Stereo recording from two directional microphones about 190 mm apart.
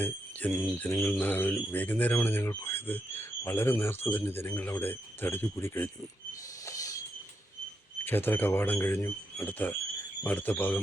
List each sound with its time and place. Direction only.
0.0 s speech: 10° left (ahead or behind)
6.7 s train: 15° left (ahead or behind)
8.0 s speech: 10° left (ahead or behind)